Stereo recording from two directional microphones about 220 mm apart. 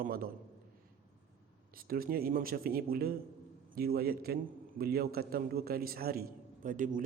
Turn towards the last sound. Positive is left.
turn(degrees=-35)  # may be behind; listen again after turning